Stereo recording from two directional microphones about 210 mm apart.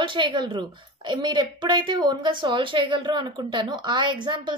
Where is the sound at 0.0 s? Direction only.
25° right (ahead or behind).